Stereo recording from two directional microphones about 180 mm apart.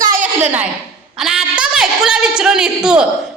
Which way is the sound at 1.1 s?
Centre (ahead or behind).